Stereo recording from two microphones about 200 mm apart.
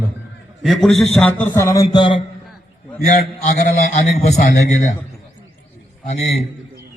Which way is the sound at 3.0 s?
40° left (ahead or behind).